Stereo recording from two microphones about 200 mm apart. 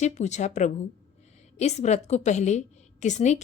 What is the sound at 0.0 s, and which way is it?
A woman's voice, 35° left (ahead or behind).